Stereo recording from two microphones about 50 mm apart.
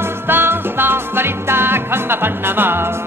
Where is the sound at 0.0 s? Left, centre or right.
Right.